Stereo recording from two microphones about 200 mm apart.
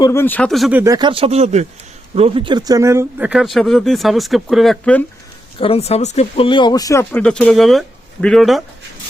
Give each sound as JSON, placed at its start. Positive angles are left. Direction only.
{"t": 0.0, "sound": "speech", "side_deg": 10}
{"t": 0.8, "sound": "speech", "side_deg": -20}
{"t": 5.5, "sound": "speech", "side_deg": 30}